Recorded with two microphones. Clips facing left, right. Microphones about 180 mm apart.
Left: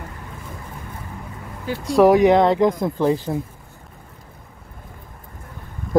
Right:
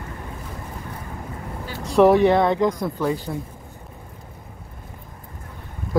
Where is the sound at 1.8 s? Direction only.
10° left (ahead or behind).